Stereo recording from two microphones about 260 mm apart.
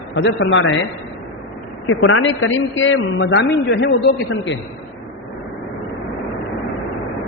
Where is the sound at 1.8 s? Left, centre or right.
Left.